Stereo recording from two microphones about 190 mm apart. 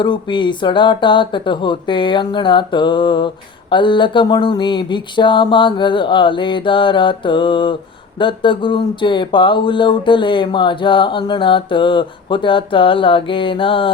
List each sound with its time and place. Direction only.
0.0 s speech: 25° left (ahead or behind)